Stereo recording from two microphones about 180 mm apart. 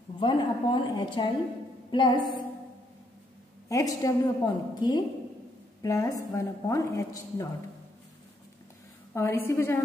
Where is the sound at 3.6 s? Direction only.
20° left (ahead or behind).